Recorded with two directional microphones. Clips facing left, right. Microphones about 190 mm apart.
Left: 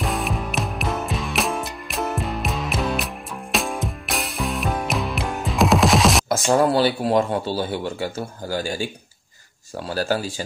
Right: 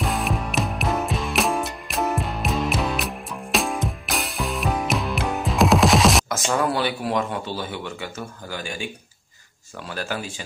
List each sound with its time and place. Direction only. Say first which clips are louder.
0.0 s music: even; centre (ahead or behind)
6.2 s speech: left 5 dB; 30° left (ahead or behind)